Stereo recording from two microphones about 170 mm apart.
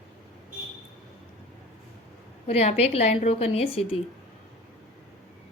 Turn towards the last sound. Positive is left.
turn(degrees=35)  # may be behind; listen again after turning